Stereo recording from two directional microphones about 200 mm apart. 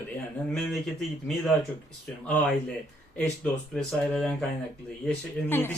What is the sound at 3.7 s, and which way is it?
A woman's voice, centre (ahead or behind).